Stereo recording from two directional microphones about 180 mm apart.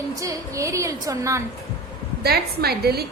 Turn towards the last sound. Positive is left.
turn(degrees=-60)  # may be behind; listen again after turning